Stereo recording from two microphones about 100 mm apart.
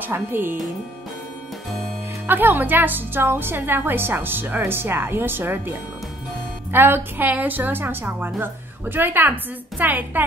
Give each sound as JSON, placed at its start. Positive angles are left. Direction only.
{"t": 0.0, "sound": "a woman's voice", "side_deg": -20}
{"t": 2.2, "sound": "a woman's voice", "side_deg": -20}